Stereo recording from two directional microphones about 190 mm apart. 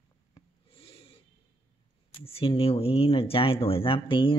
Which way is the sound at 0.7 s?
30° left (ahead or behind).